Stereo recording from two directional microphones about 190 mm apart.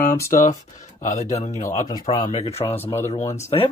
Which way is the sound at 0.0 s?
10° left (ahead or behind).